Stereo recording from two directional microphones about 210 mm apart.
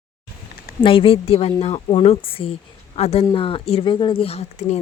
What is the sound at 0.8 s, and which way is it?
Speech, 25° left (ahead or behind).